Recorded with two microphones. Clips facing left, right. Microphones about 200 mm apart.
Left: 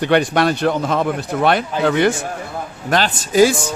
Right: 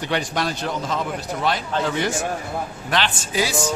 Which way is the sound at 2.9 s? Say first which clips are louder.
Left 7 dB; 40° left (ahead or behind).